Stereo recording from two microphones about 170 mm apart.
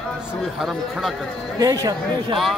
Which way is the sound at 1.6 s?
20° right (ahead or behind).